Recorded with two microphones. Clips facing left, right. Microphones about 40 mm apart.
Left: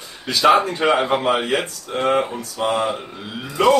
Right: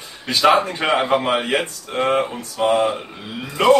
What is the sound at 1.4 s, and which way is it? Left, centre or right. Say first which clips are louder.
Speech: even; right.